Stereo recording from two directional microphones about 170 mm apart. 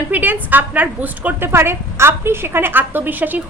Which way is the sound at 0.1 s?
10° right (ahead or behind).